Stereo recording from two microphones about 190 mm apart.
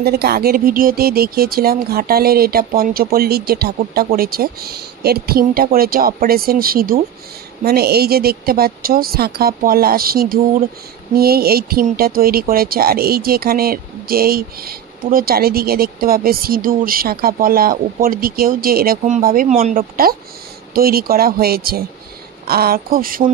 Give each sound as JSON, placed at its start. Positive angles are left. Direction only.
{"t": 0.0, "sound": "speech", "side_deg": -55}